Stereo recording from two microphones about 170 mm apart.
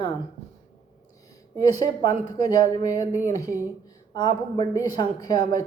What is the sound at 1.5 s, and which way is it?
Speech, 25° left (ahead or behind).